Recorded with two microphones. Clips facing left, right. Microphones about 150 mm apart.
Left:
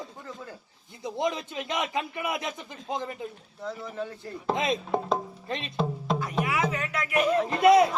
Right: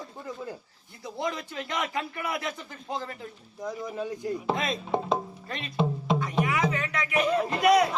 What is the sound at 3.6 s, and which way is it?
Speech, 15° right (ahead or behind).